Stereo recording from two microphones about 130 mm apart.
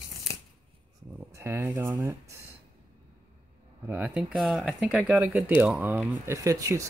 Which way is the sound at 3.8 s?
15° right (ahead or behind).